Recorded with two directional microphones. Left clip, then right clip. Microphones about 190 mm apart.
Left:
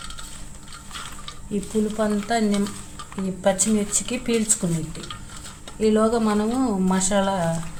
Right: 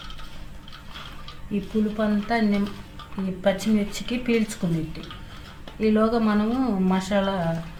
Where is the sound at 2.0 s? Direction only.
15° left (ahead or behind).